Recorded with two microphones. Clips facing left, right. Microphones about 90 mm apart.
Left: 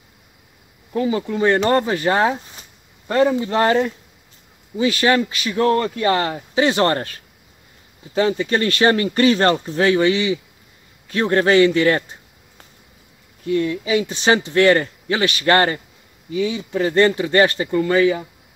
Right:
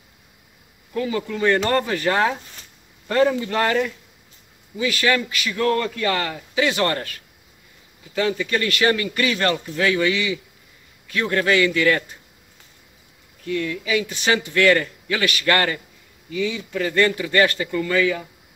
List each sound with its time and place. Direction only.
0.9 s speech: 25° left (ahead or behind)
13.4 s speech: 30° left (ahead or behind)